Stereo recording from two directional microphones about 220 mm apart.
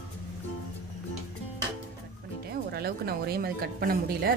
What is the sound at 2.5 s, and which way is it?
Music, 45° right (ahead or behind).